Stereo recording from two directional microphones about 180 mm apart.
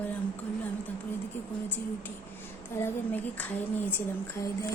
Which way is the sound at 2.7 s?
10° left (ahead or behind).